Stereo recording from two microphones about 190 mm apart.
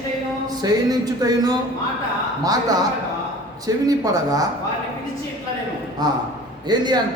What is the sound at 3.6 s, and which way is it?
Speech, 20° right (ahead or behind).